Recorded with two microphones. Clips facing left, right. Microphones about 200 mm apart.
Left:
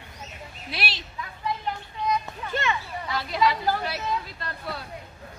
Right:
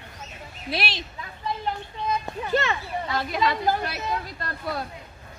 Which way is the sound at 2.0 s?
35° right (ahead or behind).